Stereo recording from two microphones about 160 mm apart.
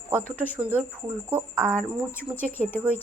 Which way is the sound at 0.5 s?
10° right (ahead or behind).